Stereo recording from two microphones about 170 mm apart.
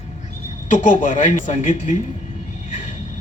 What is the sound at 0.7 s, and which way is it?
A man's voice, 50° left (ahead or behind).